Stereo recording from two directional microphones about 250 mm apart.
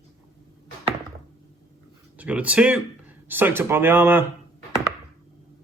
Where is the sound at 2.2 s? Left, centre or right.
Centre.